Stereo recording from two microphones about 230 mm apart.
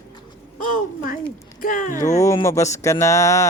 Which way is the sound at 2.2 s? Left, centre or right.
Centre.